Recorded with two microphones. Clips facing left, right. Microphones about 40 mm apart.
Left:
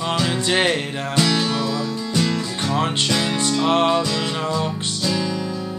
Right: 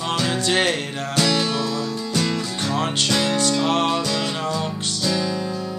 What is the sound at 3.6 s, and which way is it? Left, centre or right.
Music, left.